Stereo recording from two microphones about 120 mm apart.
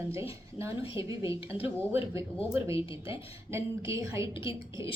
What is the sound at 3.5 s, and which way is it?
Speech, 25° right (ahead or behind).